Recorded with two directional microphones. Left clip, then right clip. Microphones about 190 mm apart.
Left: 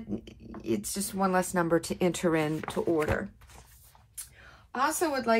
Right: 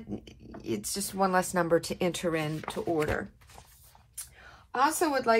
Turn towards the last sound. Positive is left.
turn(degrees=0)  # may be behind; listen again after turning